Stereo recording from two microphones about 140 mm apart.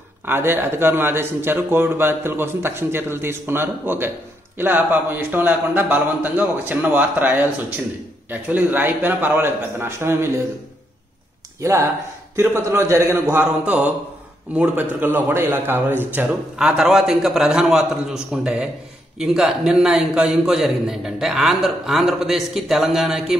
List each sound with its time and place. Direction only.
0.2 s a man's voice: 15° right (ahead or behind)
11.6 s a man's voice: 20° right (ahead or behind); by 23.3 s centre (ahead or behind)